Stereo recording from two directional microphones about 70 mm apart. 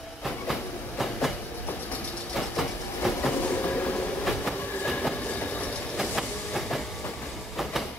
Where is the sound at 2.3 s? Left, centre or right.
Centre.